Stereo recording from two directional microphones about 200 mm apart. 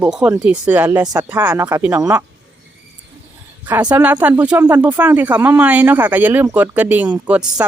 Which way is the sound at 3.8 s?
20° right (ahead or behind).